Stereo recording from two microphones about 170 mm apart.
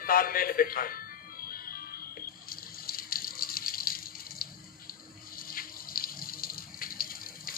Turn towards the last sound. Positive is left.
turn(degrees=60)  # may be behind; listen again after turning